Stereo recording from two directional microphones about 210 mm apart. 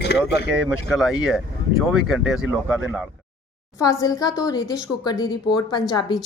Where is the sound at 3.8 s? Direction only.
15° left (ahead or behind).